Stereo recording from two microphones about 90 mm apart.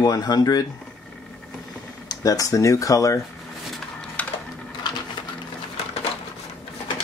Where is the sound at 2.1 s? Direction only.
40° left (ahead or behind).